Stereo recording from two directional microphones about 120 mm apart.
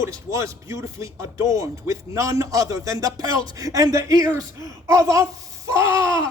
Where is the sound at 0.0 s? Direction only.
25° right (ahead or behind).